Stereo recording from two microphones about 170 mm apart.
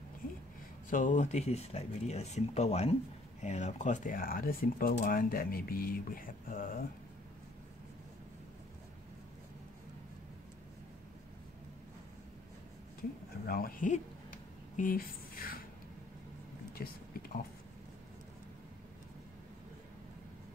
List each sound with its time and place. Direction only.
0.8 s speech: 50° left (ahead or behind)
13.5 s speech: 60° left (ahead or behind)
16.8 s speech: 60° left (ahead or behind)